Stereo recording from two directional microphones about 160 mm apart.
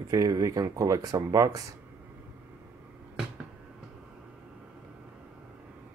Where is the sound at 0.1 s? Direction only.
20° right (ahead or behind).